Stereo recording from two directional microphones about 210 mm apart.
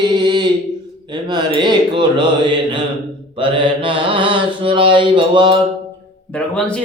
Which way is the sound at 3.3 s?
25° right (ahead or behind).